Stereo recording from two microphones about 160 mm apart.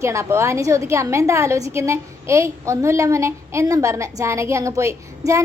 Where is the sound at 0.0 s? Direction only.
15° right (ahead or behind).